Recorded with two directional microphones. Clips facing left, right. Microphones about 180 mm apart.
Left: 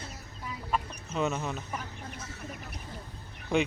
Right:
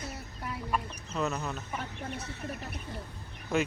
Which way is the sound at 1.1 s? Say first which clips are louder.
Left 2 dB; centre (ahead or behind).